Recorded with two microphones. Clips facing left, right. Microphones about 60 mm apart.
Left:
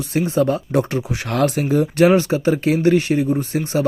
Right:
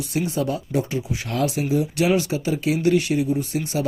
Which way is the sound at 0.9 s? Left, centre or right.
Left.